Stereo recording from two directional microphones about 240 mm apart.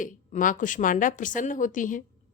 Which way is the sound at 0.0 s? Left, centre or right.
Left.